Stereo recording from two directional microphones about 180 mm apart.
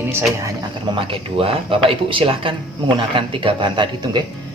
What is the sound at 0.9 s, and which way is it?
Speech, 30° right (ahead or behind).